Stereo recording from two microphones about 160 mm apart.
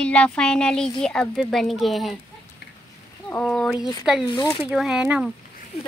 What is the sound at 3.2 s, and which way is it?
Speech, 10° left (ahead or behind).